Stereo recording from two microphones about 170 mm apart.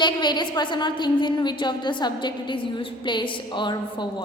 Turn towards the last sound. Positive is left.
turn(degrees=25)  # may be behind; listen again after turning